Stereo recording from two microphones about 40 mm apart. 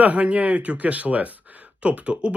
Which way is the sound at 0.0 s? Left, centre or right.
Right.